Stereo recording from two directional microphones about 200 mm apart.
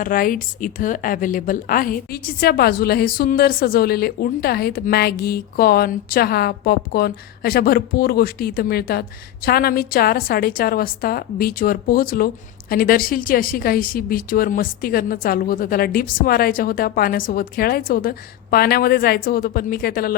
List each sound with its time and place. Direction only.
0.0 s a woman's voice: 45° left (ahead or behind)